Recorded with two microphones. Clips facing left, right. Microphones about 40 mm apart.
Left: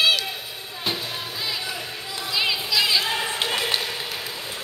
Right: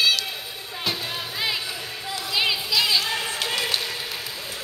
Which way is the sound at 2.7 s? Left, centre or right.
Centre.